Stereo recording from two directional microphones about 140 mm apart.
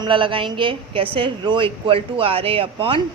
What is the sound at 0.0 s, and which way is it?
A woman's voice, 35° right (ahead or behind).